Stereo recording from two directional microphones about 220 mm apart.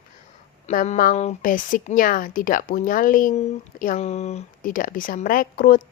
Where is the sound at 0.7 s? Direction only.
35° left (ahead or behind).